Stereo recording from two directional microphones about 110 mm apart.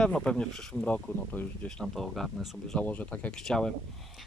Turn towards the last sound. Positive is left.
turn(degrees=5)  # may be behind; listen again after turning